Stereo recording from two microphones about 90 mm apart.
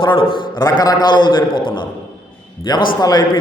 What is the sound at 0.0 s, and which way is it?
Speech, 70° left (ahead or behind).